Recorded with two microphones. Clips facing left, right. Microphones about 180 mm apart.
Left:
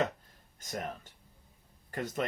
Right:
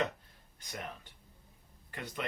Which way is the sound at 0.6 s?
45° left (ahead or behind).